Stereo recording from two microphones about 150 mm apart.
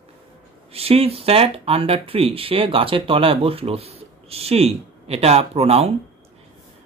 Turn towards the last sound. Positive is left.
turn(degrees=-45)  # may be behind; listen again after turning